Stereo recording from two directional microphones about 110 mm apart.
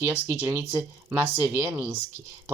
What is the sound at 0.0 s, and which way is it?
Speech, 20° right (ahead or behind).